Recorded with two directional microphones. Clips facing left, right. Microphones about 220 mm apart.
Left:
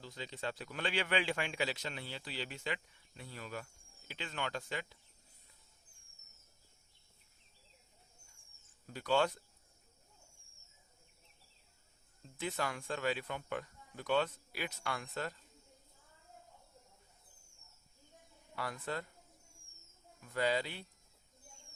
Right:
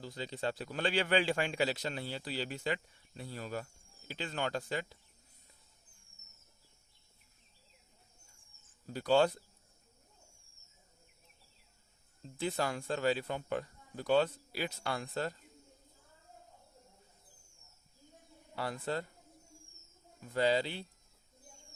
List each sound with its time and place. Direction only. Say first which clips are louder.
0.0 s a man's voice: right 5 dB; 35° right (ahead or behind)
8.9 s a man's voice: right 5 dB; 35° right (ahead or behind)
12.2 s a man's voice: right 4 dB; 30° right (ahead or behind)
18.5 s speech: right 4 dB; 30° right (ahead or behind)
20.2 s speech: right 4 dB; 30° right (ahead or behind)